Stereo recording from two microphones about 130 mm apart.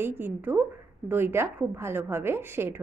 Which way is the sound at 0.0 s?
15° right (ahead or behind).